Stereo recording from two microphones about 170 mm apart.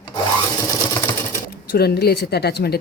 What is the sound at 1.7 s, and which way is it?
A woman's voice, 70° left (ahead or behind).